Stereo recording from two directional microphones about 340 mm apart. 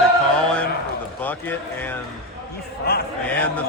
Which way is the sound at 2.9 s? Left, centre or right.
Left.